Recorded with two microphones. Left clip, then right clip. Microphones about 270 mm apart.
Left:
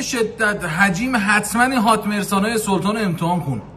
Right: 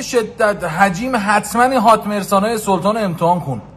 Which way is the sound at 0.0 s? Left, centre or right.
Centre.